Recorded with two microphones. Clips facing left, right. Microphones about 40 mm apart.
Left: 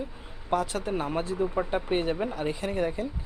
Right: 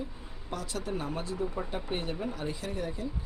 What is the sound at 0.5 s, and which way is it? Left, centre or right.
Speech, left.